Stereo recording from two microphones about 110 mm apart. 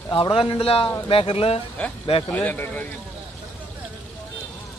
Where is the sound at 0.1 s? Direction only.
50° left (ahead or behind).